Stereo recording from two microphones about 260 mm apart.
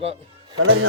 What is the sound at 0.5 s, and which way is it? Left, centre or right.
Speech, right.